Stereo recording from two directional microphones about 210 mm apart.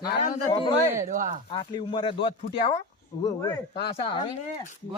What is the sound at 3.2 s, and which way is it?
Speech, 15° left (ahead or behind).